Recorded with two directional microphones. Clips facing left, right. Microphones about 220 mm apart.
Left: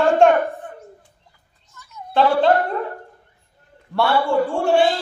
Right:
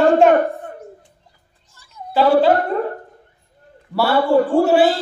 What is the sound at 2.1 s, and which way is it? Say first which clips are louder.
Speech: right 3 dB; 5° right (ahead or behind).